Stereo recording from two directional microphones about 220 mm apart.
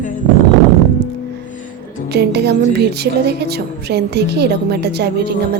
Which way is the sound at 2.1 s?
50° right (ahead or behind).